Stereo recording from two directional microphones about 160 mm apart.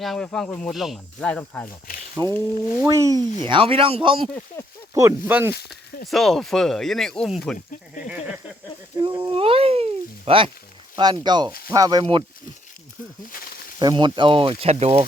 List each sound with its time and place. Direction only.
0.0 s speech: centre (ahead or behind)
2.2 s speech: 20° right (ahead or behind)
3.4 s speech: 35° right (ahead or behind)
4.6 s a sound: 15° left (ahead or behind)
4.9 s speech: 15° right (ahead or behind)
6.1 s speech: centre (ahead or behind)
9.0 s speech: 30° right (ahead or behind)
13.3 s snake: 65° left (ahead or behind)
13.7 s speech: 30° right (ahead or behind)